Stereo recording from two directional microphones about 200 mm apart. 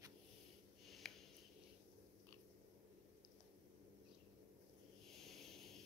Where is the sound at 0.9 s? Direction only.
Centre (ahead or behind).